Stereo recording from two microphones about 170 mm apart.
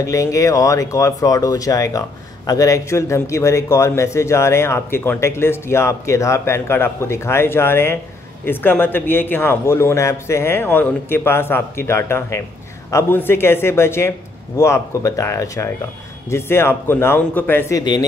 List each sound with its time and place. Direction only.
0.0 s speech: 20° left (ahead or behind)